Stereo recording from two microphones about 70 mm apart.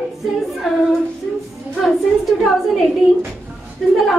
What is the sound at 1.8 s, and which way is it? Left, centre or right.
A woman's voice, centre.